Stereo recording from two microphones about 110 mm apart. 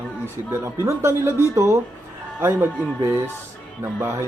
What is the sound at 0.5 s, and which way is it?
Speech, 25° right (ahead or behind).